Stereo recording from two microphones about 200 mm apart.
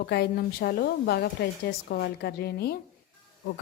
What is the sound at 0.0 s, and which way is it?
A woman's voice, 50° left (ahead or behind).